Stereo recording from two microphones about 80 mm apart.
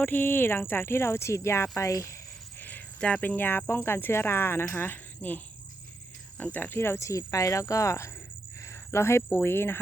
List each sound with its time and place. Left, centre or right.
0.0 s speech: left
2.6 s cricket: left
3.8 s speech: left